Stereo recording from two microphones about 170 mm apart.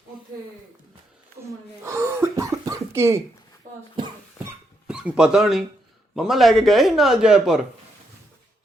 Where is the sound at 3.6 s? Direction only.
50° right (ahead or behind).